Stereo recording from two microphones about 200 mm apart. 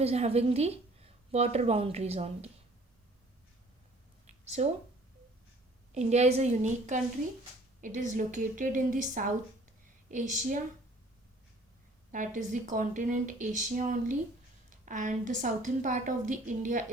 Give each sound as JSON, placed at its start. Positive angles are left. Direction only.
{"t": 0.0, "sound": "a woman's voice", "side_deg": -30}
{"t": 4.3, "sound": "a sound", "side_deg": -35}
{"t": 5.9, "sound": "a woman's voice", "side_deg": -35}
{"t": 12.1, "sound": "a woman's voice", "side_deg": -40}